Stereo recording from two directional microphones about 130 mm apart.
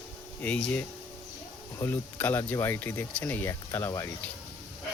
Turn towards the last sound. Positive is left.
turn(degrees=20)  # may be behind; listen again after turning